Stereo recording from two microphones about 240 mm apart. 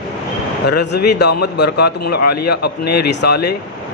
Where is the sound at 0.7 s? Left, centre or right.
Left.